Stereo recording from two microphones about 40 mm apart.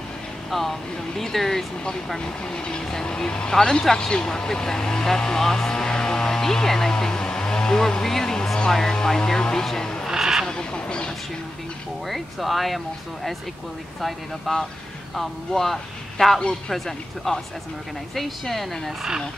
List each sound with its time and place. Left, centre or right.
0.5 s speech: centre
2.1 s speech: left
10.0 s a sound: centre
10.4 s a sound: centre
12.1 s speech: centre
14.5 s a man's voice: centre
16.3 s speech: left
16.7 s speech: centre